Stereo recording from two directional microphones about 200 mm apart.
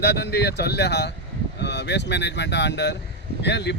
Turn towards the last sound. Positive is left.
turn(degrees=60)  # may be behind; listen again after turning